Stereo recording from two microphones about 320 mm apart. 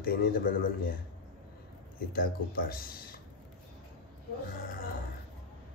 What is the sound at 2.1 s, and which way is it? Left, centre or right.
Speech, left.